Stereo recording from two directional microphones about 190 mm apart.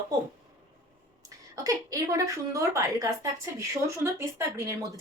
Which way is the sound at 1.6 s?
20° right (ahead or behind).